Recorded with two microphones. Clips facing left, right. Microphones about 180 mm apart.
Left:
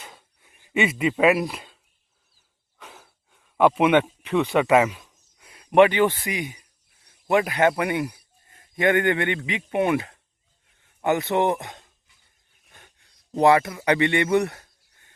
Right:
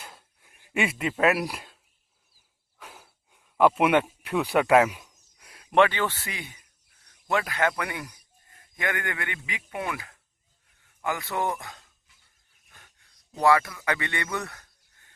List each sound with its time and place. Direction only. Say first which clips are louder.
0.0 s a sound: left 1 dB; centre (ahead or behind)
1.4 s speech: left 4 dB; 5° right (ahead or behind)
2.7 s a sound: left 1 dB; 5° right (ahead or behind)
3.6 s speech: left 3 dB; centre (ahead or behind)
4.9 s speech: left 2 dB; 10° right (ahead or behind)
5.4 s a man's voice: left 5 dB; 5° left (ahead or behind)
13.3 s speech: left 4 dB; 20° left (ahead or behind)